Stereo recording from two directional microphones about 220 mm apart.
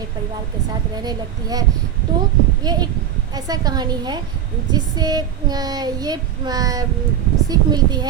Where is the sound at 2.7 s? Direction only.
20° right (ahead or behind).